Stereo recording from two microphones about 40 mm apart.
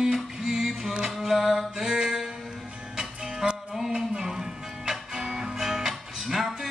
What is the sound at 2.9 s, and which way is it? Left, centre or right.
Music, centre.